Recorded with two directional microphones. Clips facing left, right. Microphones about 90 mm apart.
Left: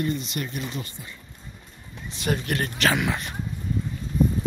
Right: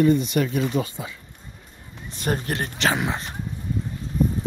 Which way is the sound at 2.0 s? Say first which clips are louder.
Right 1 dB; 45° right (ahead or behind).